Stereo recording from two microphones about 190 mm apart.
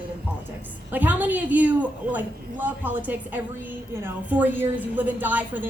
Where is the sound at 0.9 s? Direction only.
10° right (ahead or behind).